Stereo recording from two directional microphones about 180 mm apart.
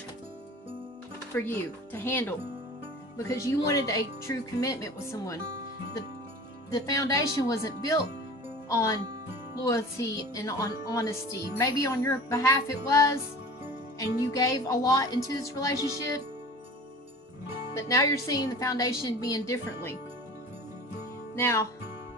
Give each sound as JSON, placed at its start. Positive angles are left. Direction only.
{"t": 1.3, "sound": "speech", "side_deg": 15}
{"t": 6.7, "sound": "speech", "side_deg": 20}
{"t": 17.7, "sound": "speech", "side_deg": 20}
{"t": 21.3, "sound": "speech", "side_deg": 15}